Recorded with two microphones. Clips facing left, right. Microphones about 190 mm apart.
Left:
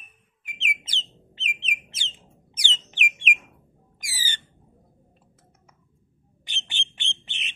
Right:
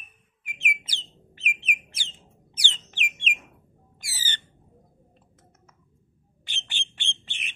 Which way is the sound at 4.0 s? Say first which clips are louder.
Left 1 dB; 15° left (ahead or behind).